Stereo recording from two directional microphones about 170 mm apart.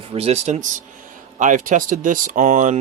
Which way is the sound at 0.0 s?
35° right (ahead or behind).